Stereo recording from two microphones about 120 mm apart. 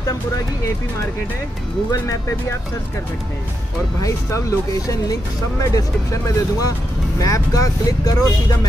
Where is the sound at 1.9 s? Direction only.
25° left (ahead or behind).